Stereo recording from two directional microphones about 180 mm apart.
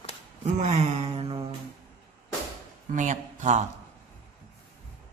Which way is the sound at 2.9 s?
45° right (ahead or behind).